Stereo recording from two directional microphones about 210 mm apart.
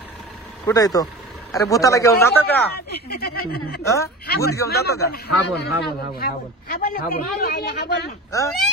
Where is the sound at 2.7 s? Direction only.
50° left (ahead or behind).